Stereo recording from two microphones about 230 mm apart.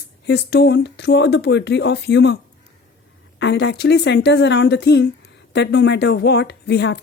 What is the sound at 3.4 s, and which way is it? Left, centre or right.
Speech, left.